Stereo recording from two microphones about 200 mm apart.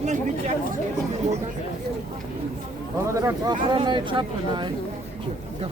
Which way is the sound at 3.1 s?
15° right (ahead or behind).